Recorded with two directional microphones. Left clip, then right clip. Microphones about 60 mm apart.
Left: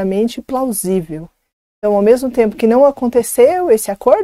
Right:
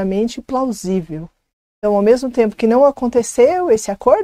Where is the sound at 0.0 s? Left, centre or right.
Left.